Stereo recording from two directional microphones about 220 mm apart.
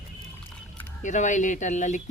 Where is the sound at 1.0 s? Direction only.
35° left (ahead or behind).